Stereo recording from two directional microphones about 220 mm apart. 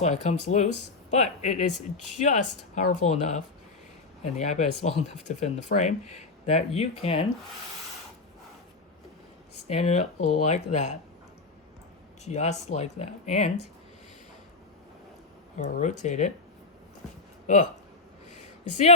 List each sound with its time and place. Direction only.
0.0 s speech: 30° left (ahead or behind)
9.6 s speech: 30° left (ahead or behind)
12.2 s speech: 30° left (ahead or behind)
15.5 s speech: 35° left (ahead or behind)
17.4 s speech: 35° left (ahead or behind)